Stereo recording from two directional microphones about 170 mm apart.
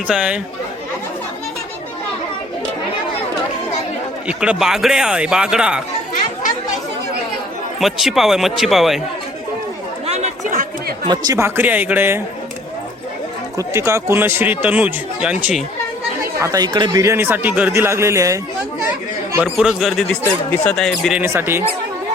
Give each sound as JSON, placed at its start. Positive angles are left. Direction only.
{"t": 0.1, "sound": "speech", "side_deg": -5}
{"t": 4.3, "sound": "speech", "side_deg": -5}
{"t": 7.8, "sound": "speech", "side_deg": 0}
{"t": 10.1, "sound": "a sound", "side_deg": -40}
{"t": 11.1, "sound": "speech", "side_deg": -20}
{"t": 13.6, "sound": "speech", "side_deg": -15}
{"t": 16.4, "sound": "speech", "side_deg": -20}
{"t": 19.4, "sound": "speech", "side_deg": 0}
{"t": 21.2, "sound": "speech", "side_deg": -15}